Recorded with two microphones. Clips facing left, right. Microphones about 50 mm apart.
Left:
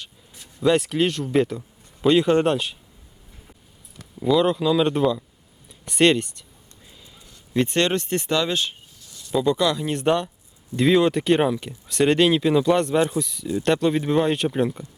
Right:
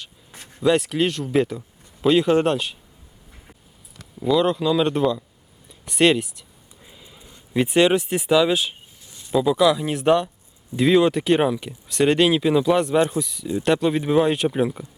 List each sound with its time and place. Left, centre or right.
0.6 s speech: centre
4.2 s speech: centre
6.8 s a sound: centre
7.5 s speech: centre
9.0 s a sound: right
9.3 s speech: centre